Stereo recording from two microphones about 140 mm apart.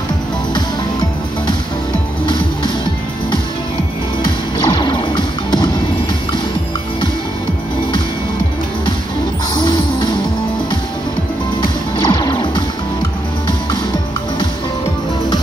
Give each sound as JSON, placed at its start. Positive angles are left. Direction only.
{"t": 4.2, "sound": "music", "side_deg": 35}
{"t": 9.5, "sound": "music", "side_deg": 35}
{"t": 11.6, "sound": "music", "side_deg": 35}